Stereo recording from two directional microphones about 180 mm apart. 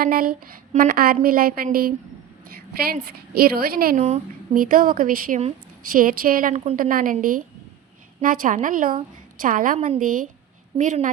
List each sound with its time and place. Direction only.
0.0 s a woman's voice: 55° right (ahead or behind)